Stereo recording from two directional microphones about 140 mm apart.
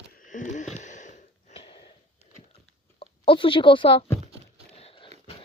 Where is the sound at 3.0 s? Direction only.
40° left (ahead or behind).